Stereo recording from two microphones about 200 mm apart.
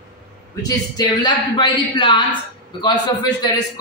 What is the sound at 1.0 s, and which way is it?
A man's voice, 20° left (ahead or behind).